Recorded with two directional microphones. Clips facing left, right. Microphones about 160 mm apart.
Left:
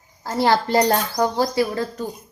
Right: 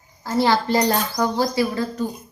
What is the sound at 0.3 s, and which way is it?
A woman's voice, 50° left (ahead or behind).